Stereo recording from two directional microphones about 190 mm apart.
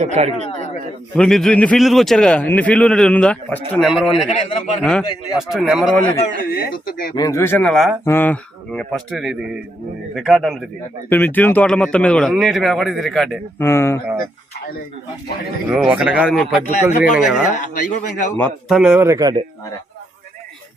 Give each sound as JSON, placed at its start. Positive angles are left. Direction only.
{"t": 0.0, "sound": "speech", "side_deg": -35}
{"t": 0.4, "sound": "speech", "side_deg": 35}
{"t": 1.1, "sound": "a man's voice", "side_deg": 5}
{"t": 4.3, "sound": "a man's voice", "side_deg": 40}
{"t": 4.8, "sound": "a man's voice", "side_deg": 5}
{"t": 6.0, "sound": "speech", "side_deg": 10}
{"t": 6.5, "sound": "speech", "side_deg": 50}
{"t": 7.2, "sound": "a man's voice", "side_deg": 15}
{"t": 13.6, "sound": "speech", "side_deg": 15}
{"t": 15.7, "sound": "a man's voice", "side_deg": -5}
{"t": 17.5, "sound": "a man's voice", "side_deg": 40}
{"t": 18.7, "sound": "a man's voice", "side_deg": -5}
{"t": 18.9, "sound": "speech", "side_deg": -15}